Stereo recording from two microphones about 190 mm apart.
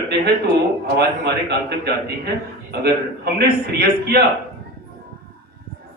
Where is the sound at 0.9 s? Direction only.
60° right (ahead or behind).